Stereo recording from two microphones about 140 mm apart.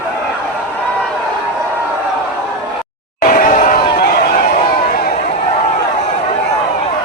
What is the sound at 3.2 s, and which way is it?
Chatter, 80° left.